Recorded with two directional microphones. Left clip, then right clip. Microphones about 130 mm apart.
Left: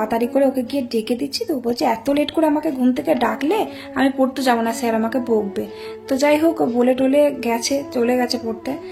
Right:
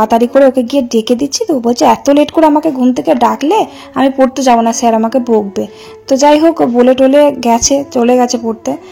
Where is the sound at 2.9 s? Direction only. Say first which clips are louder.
Right 9 dB; 45° right (ahead or behind).